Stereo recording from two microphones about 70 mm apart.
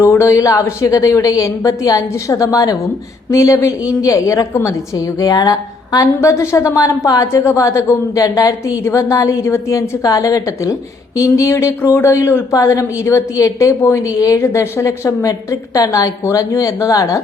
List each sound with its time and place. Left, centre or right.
0.0 s a woman's voice: left
6.1 s a woman's voice: left
7.3 s a woman's voice: left
10.0 s a woman's voice: left
12.5 s a woman's voice: left
14.4 s a woman's voice: left